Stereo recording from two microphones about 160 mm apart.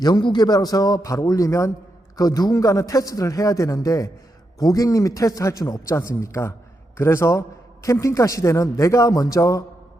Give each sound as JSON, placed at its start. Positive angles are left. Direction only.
{"t": 0.0, "sound": "a man's voice", "side_deg": 25}